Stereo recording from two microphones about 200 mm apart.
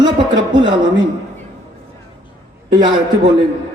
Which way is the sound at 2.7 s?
20° right (ahead or behind).